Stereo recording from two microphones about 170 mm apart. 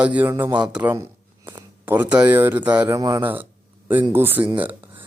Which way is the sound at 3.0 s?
20° right (ahead or behind).